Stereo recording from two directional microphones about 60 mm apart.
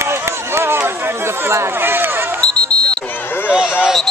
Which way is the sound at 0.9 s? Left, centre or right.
Right.